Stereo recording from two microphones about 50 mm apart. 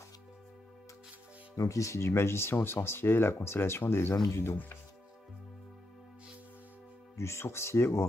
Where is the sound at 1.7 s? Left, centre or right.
Left.